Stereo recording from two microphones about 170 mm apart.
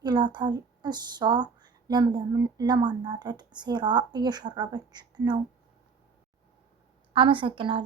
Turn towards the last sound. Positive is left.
turn(degrees=-30)  # may be behind; listen again after turning